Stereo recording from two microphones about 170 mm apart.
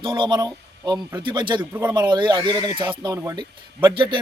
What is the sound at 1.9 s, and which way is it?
A man's voice, 25° right (ahead or behind).